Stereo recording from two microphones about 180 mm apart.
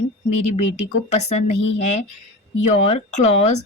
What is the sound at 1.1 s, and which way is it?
Speech, 35° left (ahead or behind).